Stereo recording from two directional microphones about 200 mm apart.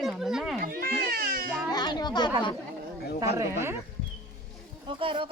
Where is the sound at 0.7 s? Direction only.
50° right (ahead or behind).